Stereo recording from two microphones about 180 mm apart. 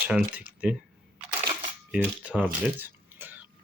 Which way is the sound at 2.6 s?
10° right (ahead or behind).